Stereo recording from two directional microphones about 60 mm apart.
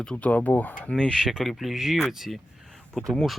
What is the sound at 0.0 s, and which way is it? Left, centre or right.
Speech, centre.